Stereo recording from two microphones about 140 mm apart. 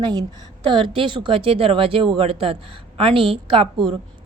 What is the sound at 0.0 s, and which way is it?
A woman's voice, 30° right (ahead or behind).